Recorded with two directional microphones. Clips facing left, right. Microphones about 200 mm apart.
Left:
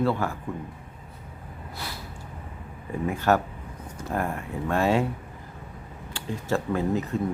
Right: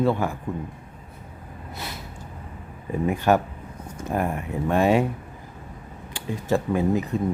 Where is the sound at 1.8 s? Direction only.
20° right (ahead or behind).